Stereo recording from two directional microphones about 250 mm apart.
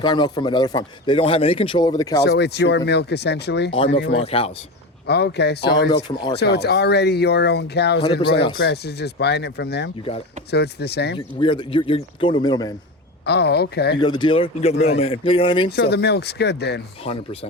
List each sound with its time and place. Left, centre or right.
0.0 s speech: centre
2.2 s speech: left
4.2 s speech: left
5.0 s speech: left
11.3 s speech: centre
13.2 s speech: left
14.0 s speech: centre
15.7 s speech: left
17.0 s speech: left